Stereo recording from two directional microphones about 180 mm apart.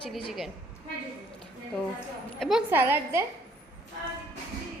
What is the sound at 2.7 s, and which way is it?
Speech, 10° right (ahead or behind).